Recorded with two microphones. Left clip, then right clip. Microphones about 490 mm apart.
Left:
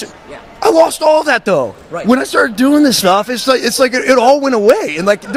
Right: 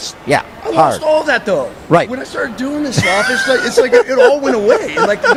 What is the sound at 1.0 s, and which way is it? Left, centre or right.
Speech, left.